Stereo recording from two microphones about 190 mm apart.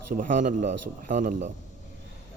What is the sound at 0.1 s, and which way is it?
A man's voice, 45° right (ahead or behind).